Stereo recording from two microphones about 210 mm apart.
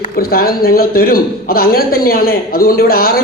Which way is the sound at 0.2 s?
45° left (ahead or behind).